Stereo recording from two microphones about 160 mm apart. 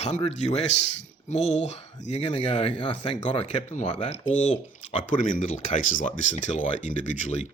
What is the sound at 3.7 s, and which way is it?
Speech, 45° left (ahead or behind).